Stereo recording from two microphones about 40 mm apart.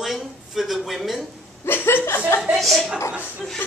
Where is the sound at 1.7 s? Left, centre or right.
Left.